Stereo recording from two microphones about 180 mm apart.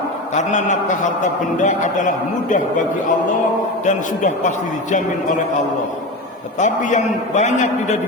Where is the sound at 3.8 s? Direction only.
45° left (ahead or behind).